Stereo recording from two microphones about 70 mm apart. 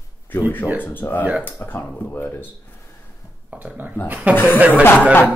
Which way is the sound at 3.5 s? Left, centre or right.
Right.